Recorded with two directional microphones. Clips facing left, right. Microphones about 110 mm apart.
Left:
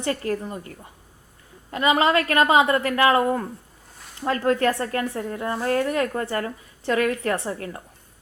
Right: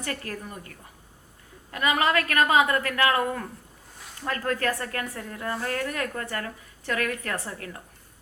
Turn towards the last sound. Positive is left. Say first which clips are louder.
# left 7 dB
turn(degrees=30)  # may be behind; listen again after turning